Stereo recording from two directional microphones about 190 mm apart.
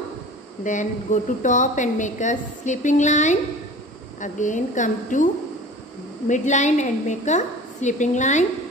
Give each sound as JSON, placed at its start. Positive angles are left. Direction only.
{"t": 0.7, "sound": "a woman's voice", "side_deg": 40}